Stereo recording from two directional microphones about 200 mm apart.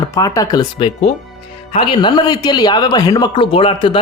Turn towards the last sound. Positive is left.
turn(degrees=25)  # may be behind; listen again after turning